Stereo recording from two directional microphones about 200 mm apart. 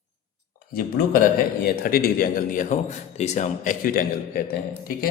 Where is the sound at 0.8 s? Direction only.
45° left (ahead or behind).